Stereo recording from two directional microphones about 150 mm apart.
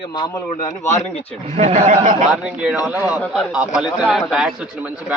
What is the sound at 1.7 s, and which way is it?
Speech, 60° right (ahead or behind).